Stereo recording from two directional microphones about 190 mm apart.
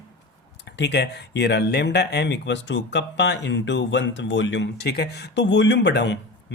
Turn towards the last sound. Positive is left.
turn(degrees=65)  # may be behind; listen again after turning